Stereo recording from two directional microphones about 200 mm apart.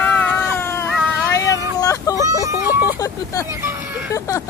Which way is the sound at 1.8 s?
15° left (ahead or behind).